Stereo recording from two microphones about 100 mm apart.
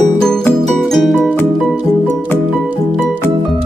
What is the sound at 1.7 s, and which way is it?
Music, 15° right (ahead or behind).